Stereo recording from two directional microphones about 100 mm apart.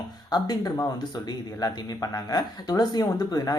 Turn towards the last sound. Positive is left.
turn(degrees=40)  # may be behind; listen again after turning